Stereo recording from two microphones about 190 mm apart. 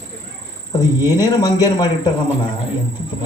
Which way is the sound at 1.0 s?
20° left (ahead or behind).